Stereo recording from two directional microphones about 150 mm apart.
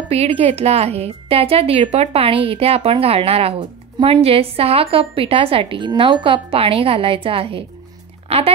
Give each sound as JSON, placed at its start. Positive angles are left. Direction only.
{"t": 0.1, "sound": "a woman's voice", "side_deg": -45}